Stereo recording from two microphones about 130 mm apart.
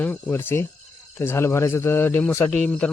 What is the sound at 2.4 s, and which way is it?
Speech, 5° left (ahead or behind).